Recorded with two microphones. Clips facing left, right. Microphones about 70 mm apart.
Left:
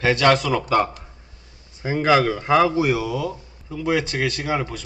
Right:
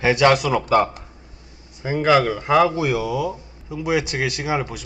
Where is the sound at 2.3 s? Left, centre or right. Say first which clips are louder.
Even; centre.